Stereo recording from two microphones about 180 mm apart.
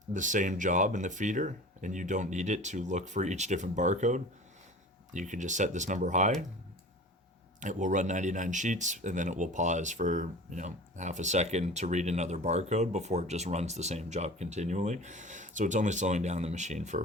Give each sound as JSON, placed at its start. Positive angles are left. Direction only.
{"t": 0.1, "sound": "speech", "side_deg": -45}
{"t": 7.6, "sound": "speech", "side_deg": -45}